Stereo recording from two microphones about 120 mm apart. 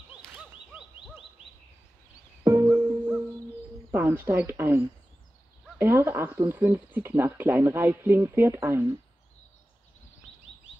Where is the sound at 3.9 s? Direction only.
15° right (ahead or behind).